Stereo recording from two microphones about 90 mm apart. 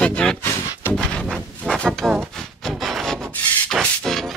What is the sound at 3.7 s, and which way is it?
Music, 5° left (ahead or behind).